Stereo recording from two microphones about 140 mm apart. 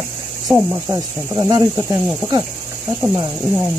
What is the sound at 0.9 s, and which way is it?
Speech, 25° right (ahead or behind).